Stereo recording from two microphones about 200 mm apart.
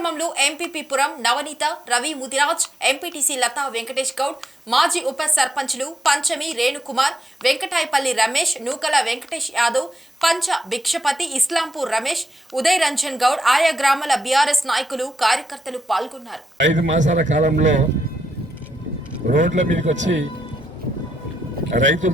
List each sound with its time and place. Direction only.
0.0 s a woman's voice: centre (ahead or behind)
17.0 s speech: 40° right (ahead or behind)
19.4 s speech: 40° right (ahead or behind)
21.8 s speech: 40° right (ahead or behind)